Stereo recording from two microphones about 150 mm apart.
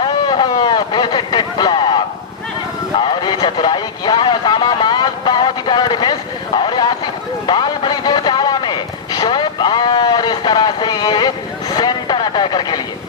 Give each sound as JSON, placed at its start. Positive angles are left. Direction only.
{"t": 0.0, "sound": "vehicle", "side_deg": 30}
{"t": 3.1, "sound": "vehicle", "side_deg": 30}
{"t": 7.4, "sound": "a sound", "side_deg": 30}
{"t": 11.7, "sound": "vehicle", "side_deg": 30}